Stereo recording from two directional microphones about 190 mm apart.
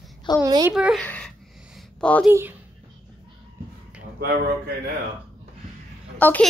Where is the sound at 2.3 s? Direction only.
10° right (ahead or behind).